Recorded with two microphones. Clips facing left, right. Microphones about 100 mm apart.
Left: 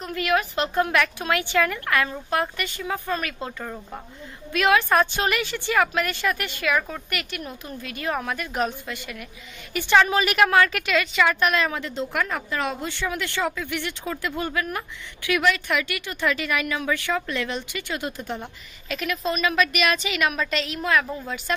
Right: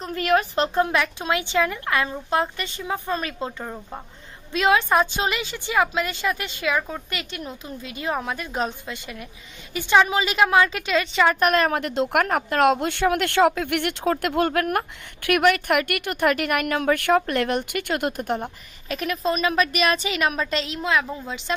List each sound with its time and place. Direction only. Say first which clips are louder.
0.0 s a woman's voice: right 2 dB; 35° right (ahead or behind)
0.7 s a woman's voice: left 2 dB; 20° right (ahead or behind); by 18.5 s 55° right (ahead or behind)
18.9 s a woman's voice: right 2 dB; 35° right (ahead or behind); by 21.5 s 15° right (ahead or behind)